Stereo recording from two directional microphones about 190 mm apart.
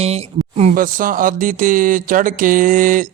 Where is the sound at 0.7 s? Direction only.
45° right (ahead or behind).